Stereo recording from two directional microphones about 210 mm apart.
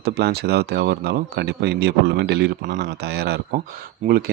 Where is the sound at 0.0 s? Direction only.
50° right (ahead or behind).